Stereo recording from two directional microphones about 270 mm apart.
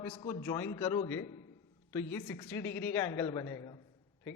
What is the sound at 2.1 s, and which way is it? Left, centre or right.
A man's voice, centre.